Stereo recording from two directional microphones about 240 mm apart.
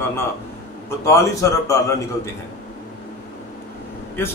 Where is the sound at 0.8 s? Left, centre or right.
Centre.